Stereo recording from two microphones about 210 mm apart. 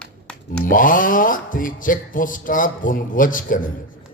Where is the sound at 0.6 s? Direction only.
40° left (ahead or behind).